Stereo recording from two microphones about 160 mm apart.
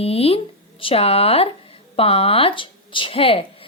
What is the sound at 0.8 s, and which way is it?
Speech, 35° left (ahead or behind).